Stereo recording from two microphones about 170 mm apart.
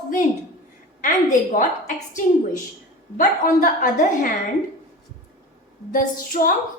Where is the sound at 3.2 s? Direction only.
55° left (ahead or behind).